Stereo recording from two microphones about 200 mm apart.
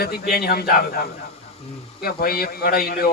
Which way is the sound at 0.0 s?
50° left (ahead or behind).